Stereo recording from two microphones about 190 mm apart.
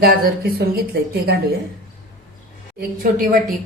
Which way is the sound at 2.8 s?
50° right (ahead or behind).